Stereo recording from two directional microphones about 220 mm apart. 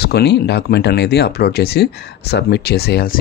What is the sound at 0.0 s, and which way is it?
Speech, 50° left (ahead or behind).